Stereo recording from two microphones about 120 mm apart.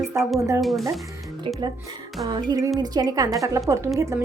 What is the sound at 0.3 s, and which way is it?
Speech, 25° right (ahead or behind).